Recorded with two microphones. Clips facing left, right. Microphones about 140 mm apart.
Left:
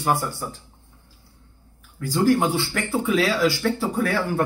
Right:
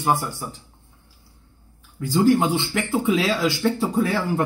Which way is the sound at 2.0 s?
20° right (ahead or behind).